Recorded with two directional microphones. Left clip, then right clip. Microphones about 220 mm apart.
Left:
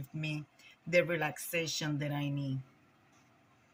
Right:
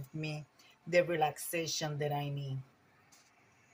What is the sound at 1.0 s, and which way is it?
Speech, 25° right (ahead or behind).